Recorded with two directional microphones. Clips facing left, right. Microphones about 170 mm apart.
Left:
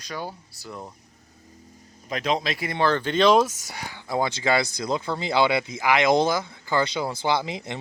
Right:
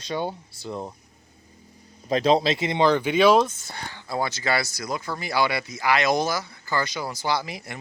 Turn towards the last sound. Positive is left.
turn(degrees=20)  # may be behind; listen again after turning